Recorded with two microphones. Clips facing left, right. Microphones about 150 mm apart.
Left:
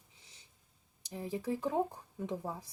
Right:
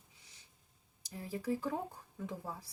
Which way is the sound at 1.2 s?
20° left (ahead or behind).